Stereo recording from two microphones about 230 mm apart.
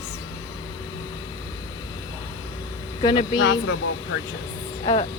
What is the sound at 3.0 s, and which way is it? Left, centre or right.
Speech, centre.